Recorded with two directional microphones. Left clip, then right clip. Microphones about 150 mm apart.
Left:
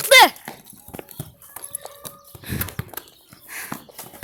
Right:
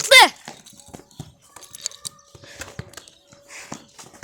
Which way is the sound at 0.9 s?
25° right (ahead or behind).